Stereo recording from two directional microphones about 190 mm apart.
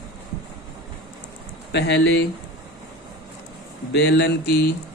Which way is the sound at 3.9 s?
70° left (ahead or behind).